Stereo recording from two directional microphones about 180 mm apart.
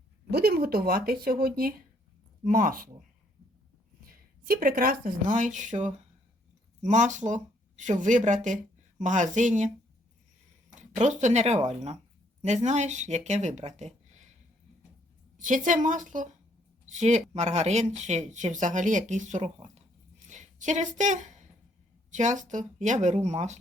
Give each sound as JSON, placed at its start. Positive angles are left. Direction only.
{"t": 0.3, "sound": "speech", "side_deg": -60}
{"t": 4.0, "sound": "speech", "side_deg": -55}
{"t": 11.0, "sound": "speech", "side_deg": -40}
{"t": 15.4, "sound": "speech", "side_deg": -45}
{"t": 20.2, "sound": "a sound", "side_deg": -40}
{"t": 22.1, "sound": "speech", "side_deg": -45}